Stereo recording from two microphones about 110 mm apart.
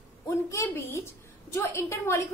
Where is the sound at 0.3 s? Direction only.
30° left (ahead or behind).